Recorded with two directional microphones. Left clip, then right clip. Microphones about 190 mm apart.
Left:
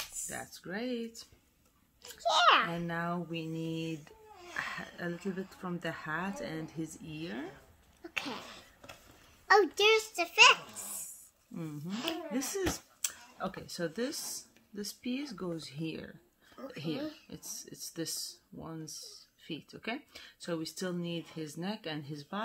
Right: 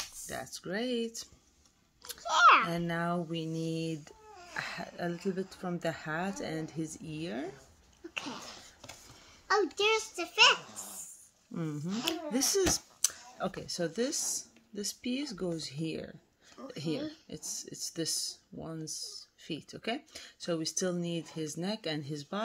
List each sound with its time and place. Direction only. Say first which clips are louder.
0.3 s speech: right 7 dB; 30° right (ahead or behind)
2.2 s a child's voice: right 3 dB; 10° left (ahead or behind)
2.7 s speech: right 3 dB; 30° right (ahead or behind)
9.5 s a child's voice: left 3 dB; 30° left (ahead or behind)
11.5 s speech: right 4 dB; 40° right (ahead or behind); by 16.2 s 20° right (ahead or behind)
16.6 s a child's voice: even; 10° left (ahead or behind)
17.3 s speech: right 4 dB; 20° right (ahead or behind)